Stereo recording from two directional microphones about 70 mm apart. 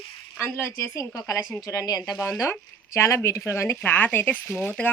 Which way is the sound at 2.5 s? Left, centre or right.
Left.